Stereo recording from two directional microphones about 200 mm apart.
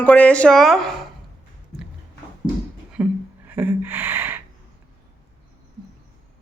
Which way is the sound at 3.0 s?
5° right (ahead or behind).